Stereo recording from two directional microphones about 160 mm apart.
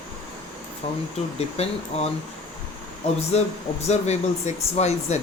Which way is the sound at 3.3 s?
40° left (ahead or behind).